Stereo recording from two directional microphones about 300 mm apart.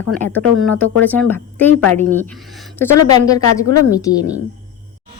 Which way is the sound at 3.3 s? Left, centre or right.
Centre.